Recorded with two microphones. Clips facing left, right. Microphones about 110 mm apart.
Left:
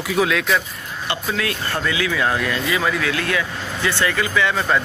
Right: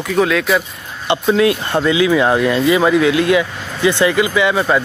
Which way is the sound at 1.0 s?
25° right (ahead or behind).